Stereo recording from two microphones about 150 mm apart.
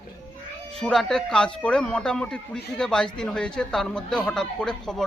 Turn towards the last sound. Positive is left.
turn(degrees=5)  # may be behind; listen again after turning